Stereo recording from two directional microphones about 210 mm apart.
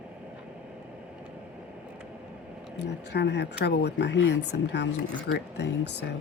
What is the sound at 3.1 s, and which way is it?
Speech, 55° left (ahead or behind).